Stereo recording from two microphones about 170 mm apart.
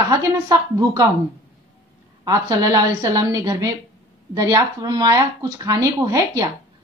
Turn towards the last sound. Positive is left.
turn(degrees=-20)  # may be behind; listen again after turning